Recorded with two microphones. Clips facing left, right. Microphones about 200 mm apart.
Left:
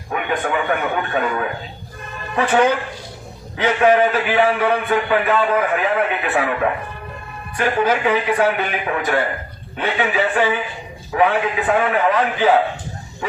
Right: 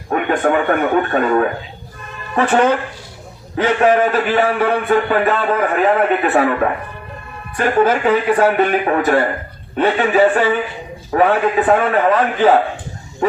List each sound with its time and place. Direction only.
0.1 s a man's voice: 50° right (ahead or behind)